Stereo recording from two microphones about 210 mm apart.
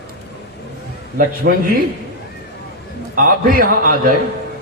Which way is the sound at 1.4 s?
55° right (ahead or behind).